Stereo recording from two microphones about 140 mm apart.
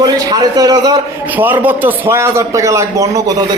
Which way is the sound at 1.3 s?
15° right (ahead or behind).